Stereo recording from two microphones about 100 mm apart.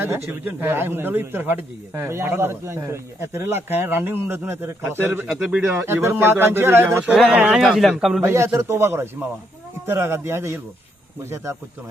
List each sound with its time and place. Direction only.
0.3 s speech: 20° right (ahead or behind)
5.3 s speech: 10° right (ahead or behind)
5.8 s speech: 25° right (ahead or behind)
7.0 s speech: 10° right (ahead or behind)
8.2 s speech: 25° right (ahead or behind)